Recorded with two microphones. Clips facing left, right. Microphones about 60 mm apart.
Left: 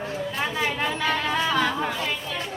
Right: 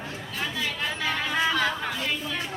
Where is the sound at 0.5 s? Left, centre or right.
Left.